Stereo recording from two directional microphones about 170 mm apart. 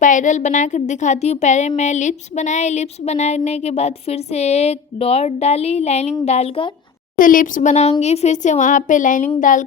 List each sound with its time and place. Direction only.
0.0 s a woman's voice: 50° left (ahead or behind)
7.2 s speech: 55° left (ahead or behind)